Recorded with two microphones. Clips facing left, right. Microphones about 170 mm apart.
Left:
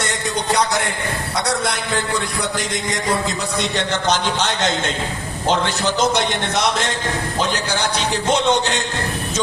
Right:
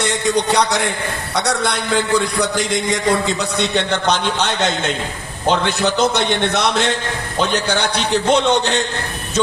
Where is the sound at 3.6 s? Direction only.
60° right (ahead or behind).